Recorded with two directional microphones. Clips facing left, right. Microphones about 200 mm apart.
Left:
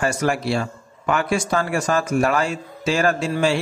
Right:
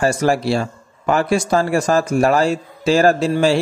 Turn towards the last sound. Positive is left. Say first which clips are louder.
# right 5 dB
turn(degrees=-35)  # may be behind; listen again after turning